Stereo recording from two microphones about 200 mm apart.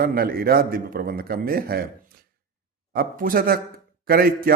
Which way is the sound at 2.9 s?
45° right (ahead or behind).